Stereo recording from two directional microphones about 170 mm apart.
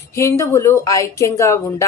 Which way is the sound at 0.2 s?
15° left (ahead or behind).